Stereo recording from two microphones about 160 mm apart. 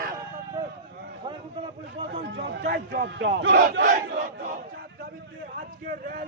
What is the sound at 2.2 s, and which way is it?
A man's voice, 90° right.